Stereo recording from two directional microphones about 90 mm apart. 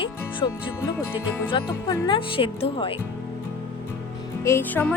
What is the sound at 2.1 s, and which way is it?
Speech, 80° left.